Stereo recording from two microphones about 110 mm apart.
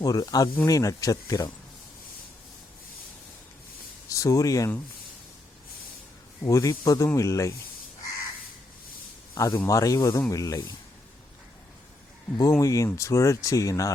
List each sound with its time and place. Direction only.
0.0 s speech: 35° left (ahead or behind)
4.1 s speech: 30° left (ahead or behind)
6.4 s speech: 30° left (ahead or behind)
9.3 s speech: 35° left (ahead or behind)
12.4 s speech: 30° left (ahead or behind)